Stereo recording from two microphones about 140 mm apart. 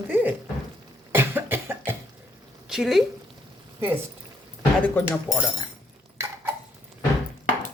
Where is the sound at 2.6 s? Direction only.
5° right (ahead or behind).